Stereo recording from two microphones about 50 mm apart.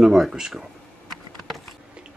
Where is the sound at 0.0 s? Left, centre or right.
Centre.